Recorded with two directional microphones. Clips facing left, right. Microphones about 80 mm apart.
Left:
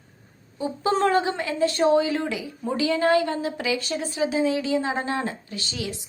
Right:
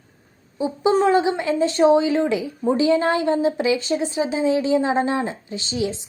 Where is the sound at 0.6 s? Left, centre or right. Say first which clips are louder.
Right 4 dB; centre.